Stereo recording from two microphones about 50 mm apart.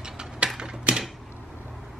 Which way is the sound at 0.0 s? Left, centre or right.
Centre.